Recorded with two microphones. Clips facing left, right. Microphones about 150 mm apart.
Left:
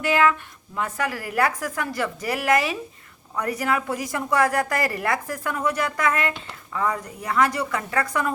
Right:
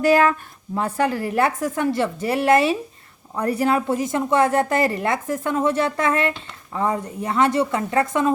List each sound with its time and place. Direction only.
0.0 s a woman's voice: 40° right (ahead or behind)